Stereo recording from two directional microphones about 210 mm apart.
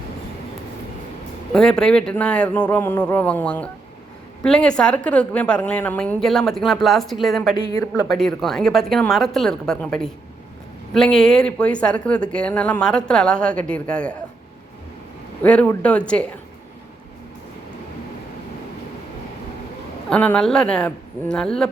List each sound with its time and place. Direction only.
1.5 s a woman's voice: 5° left (ahead or behind)
7.6 s speech: 15° left (ahead or behind)
8.2 s a woman's voice: centre (ahead or behind)
15.4 s a woman's voice: 5° left (ahead or behind)
20.1 s a woman's voice: 5° left (ahead or behind)